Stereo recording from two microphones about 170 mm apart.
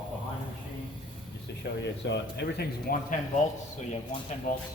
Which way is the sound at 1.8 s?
90° left.